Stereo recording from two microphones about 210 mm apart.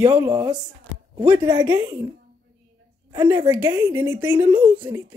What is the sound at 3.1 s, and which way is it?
Speech, 15° right (ahead or behind).